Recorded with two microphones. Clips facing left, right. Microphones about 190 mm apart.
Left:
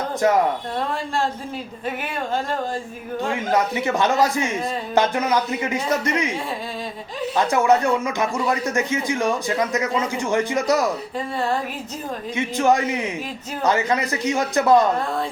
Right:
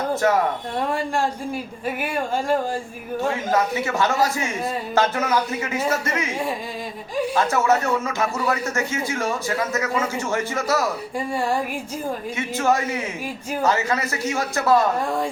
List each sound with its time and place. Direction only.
3.5 s speech: 15° left (ahead or behind)
7.3 s speech: 15° left (ahead or behind)
11.3 s music: 10° right (ahead or behind)
12.4 s speech: 15° left (ahead or behind)